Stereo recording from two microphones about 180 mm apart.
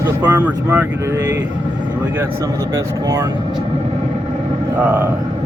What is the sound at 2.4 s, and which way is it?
Speech, 15° right (ahead or behind).